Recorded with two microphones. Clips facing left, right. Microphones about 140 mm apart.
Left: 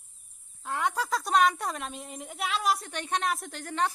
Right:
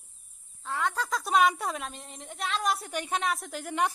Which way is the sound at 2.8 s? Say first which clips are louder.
Even; 10° right (ahead or behind).